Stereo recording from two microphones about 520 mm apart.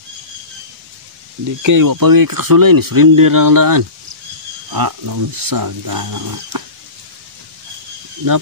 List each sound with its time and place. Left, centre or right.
1.6 s speech: right